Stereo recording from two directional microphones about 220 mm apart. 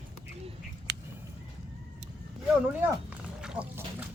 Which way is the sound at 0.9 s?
50° right (ahead or behind).